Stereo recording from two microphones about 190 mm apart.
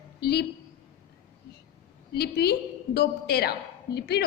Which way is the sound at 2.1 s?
55° left (ahead or behind).